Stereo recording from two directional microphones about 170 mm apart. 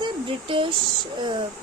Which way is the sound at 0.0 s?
30° right (ahead or behind).